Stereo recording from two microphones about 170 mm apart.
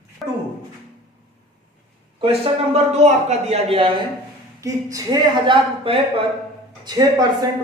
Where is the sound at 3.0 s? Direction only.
40° right (ahead or behind).